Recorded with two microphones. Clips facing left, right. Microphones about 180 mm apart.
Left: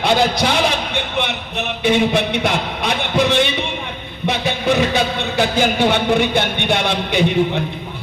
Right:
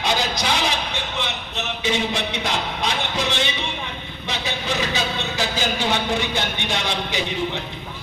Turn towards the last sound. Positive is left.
turn(degrees=60)  # may be behind; listen again after turning